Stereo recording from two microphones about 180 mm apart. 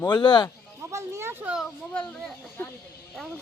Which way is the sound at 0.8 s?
15° right (ahead or behind).